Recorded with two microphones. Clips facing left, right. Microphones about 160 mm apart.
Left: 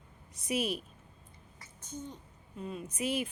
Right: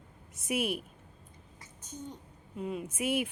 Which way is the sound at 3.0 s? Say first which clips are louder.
Right 2 dB; 60° right (ahead or behind).